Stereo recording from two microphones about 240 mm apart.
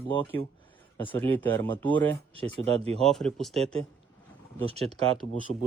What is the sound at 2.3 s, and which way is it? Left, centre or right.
Speech, right.